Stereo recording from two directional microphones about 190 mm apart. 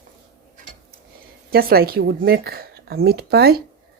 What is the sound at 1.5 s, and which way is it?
Speech, 55° right (ahead or behind).